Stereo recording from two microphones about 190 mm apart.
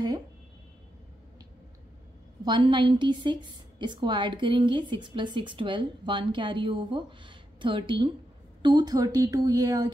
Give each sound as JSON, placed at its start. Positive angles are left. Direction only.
{"t": 2.4, "sound": "a woman's voice", "side_deg": -25}